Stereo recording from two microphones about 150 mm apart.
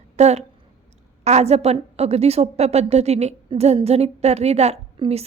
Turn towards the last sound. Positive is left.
turn(degrees=-40)  # may be behind; listen again after turning